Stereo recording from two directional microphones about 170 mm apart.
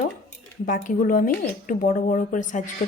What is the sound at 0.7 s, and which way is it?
Speech, 55° left (ahead or behind).